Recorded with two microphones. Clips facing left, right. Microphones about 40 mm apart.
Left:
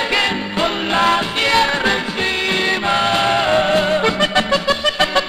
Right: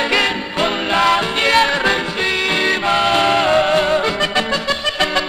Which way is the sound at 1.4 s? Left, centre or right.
Right.